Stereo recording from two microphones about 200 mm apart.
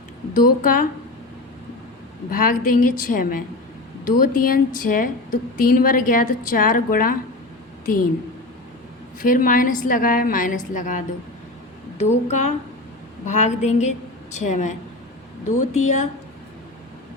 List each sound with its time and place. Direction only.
0.3 s a woman's voice: 45° left (ahead or behind)
2.3 s a woman's voice: 45° left (ahead or behind)
9.2 s a woman's voice: 45° left (ahead or behind)